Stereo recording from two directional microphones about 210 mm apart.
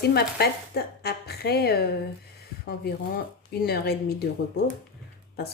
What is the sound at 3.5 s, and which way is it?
Speech, 50° left (ahead or behind).